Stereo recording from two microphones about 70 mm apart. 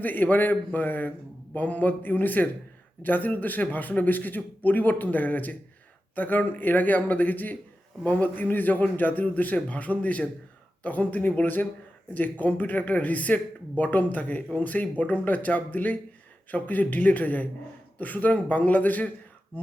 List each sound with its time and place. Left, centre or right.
0.0 s a man's voice: left